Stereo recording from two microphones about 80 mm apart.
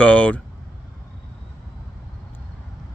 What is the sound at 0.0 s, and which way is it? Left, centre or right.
Speech, centre.